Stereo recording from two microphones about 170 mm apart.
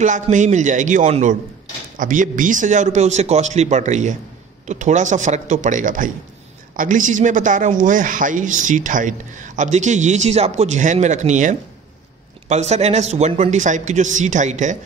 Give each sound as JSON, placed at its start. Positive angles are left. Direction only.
{"t": 0.0, "sound": "rub", "side_deg": -45}